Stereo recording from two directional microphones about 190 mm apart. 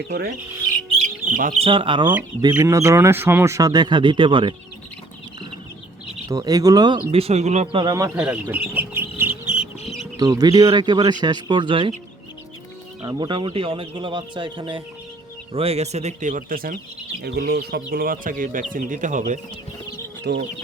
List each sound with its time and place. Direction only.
1.3 s speech: 45° right (ahead or behind)
1.5 s a man's voice: 30° right (ahead or behind)
2.4 s speech: 15° right (ahead or behind)
6.2 s a man's voice: 20° right (ahead or behind)
7.1 s speech: 30° right (ahead or behind)
8.2 s bird: 10° right (ahead or behind)
10.2 s a man's voice: 20° right (ahead or behind)
13.1 s a man's voice: 25° right (ahead or behind); by 16.7 s 50° right (ahead or behind)
17.2 s speech: 60° right (ahead or behind); by 19.4 s 40° right (ahead or behind)
20.3 s speech: 65° right (ahead or behind)